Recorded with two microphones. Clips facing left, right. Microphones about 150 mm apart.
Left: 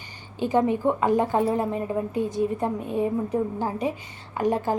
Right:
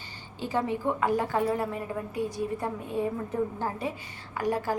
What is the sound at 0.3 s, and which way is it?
A woman's voice, 20° left (ahead or behind).